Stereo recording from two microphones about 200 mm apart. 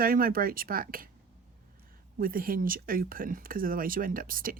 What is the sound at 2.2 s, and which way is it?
Speech, 45° right (ahead or behind).